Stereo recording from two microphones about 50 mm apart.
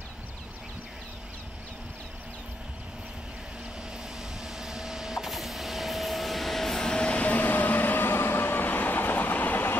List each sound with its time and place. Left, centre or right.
4.6 s printer: centre; by 9.8 s left